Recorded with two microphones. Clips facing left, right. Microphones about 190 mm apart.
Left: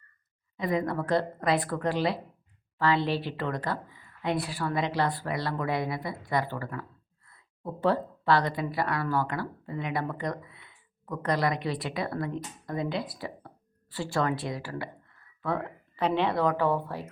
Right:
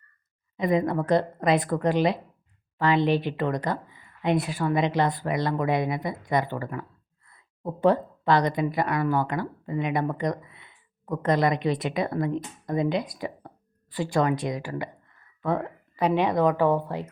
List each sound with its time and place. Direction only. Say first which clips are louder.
0.5 s speech: right 5 dB; 20° right (ahead or behind)